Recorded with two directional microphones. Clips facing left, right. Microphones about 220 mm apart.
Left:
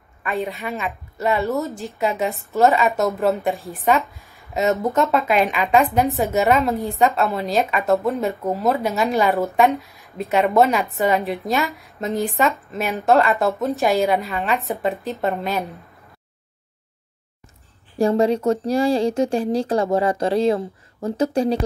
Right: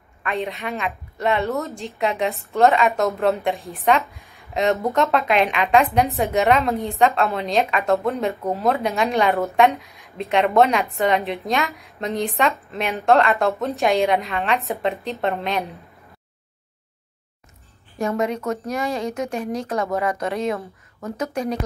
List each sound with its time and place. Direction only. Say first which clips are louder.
0.2 s a woman's voice: left 1 dB; centre (ahead or behind)
17.9 s speech: left 6 dB; 30° left (ahead or behind)